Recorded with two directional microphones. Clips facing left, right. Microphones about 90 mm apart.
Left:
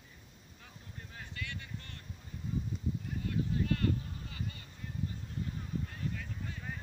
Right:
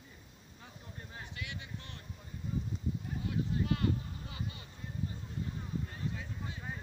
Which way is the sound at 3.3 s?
20° right (ahead or behind).